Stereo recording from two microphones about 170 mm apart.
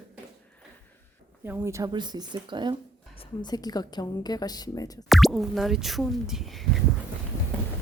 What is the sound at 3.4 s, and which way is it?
A woman's voice, 25° left (ahead or behind).